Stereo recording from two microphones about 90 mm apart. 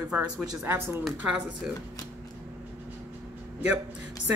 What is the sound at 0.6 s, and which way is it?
Speech, 25° right (ahead or behind).